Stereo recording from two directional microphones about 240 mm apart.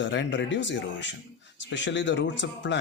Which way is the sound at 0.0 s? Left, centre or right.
Left.